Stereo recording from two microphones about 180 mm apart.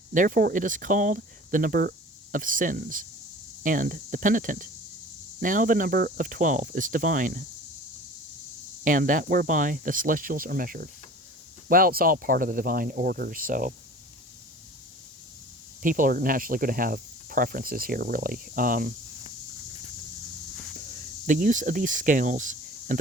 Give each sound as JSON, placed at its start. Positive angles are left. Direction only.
{"t": 0.1, "sound": "speech", "side_deg": -50}
{"t": 8.8, "sound": "speech", "side_deg": -45}
{"t": 15.8, "sound": "speech", "side_deg": -50}
{"t": 21.2, "sound": "speech", "side_deg": -45}